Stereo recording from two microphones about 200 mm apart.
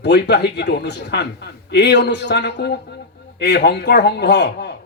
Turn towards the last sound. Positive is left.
turn(degrees=55)  # may be behind; listen again after turning